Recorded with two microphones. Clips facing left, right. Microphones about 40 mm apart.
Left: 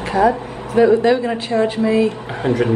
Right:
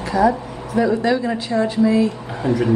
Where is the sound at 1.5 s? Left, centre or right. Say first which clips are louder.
Even; left.